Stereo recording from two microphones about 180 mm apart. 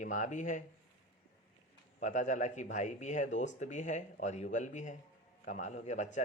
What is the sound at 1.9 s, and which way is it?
Speech, 45° left (ahead or behind).